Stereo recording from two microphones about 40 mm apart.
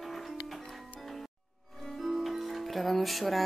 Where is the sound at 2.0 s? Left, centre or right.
Centre.